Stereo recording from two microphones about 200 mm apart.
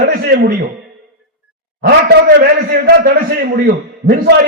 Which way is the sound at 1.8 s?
50° right (ahead or behind).